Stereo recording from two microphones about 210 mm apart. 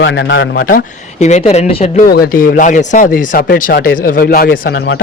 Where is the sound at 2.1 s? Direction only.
45° left (ahead or behind).